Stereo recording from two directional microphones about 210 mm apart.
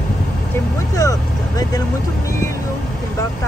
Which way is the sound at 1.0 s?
15° left (ahead or behind).